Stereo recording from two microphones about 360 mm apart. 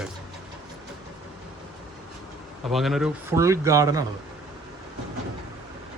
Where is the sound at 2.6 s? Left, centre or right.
Centre.